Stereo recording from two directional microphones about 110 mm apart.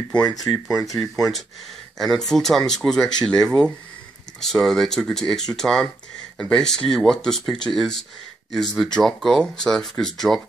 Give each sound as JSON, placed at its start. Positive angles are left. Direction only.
{"t": 0.3, "sound": "speech", "side_deg": 35}
{"t": 2.0, "sound": "speech", "side_deg": 5}